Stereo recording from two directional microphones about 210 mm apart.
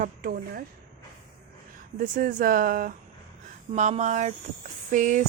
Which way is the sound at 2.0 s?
40° right (ahead or behind).